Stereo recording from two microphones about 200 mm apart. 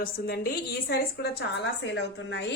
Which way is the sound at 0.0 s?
50° left (ahead or behind).